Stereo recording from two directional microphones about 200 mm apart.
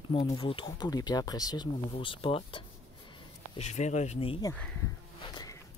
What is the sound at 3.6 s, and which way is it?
Speech, 35° left (ahead or behind).